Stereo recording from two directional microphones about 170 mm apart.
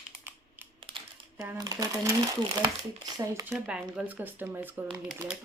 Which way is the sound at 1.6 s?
20° right (ahead or behind).